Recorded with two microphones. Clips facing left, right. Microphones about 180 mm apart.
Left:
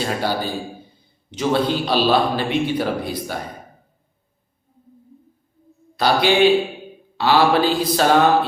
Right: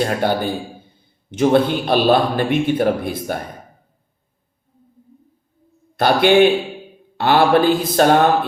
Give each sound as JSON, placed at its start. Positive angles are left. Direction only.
{"t": 0.0, "sound": "a man's voice", "side_deg": -55}
{"t": 6.0, "sound": "a man's voice", "side_deg": -55}